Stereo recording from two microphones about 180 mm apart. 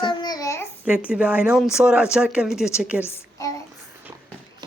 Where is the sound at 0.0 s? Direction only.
25° left (ahead or behind).